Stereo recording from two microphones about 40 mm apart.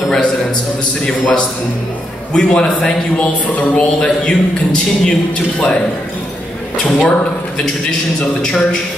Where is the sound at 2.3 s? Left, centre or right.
Left.